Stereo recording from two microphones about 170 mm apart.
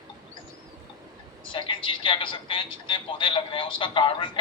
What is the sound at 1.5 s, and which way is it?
Speech, 30° left (ahead or behind).